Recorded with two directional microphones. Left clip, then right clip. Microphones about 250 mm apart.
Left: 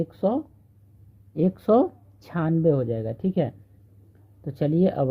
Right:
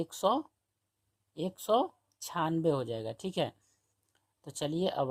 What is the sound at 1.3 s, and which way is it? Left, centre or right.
Speech, centre.